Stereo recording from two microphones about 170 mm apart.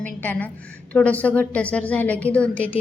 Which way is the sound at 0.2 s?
10° left (ahead or behind).